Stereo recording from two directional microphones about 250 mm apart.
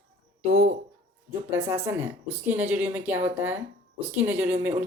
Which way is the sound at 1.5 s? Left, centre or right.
Centre.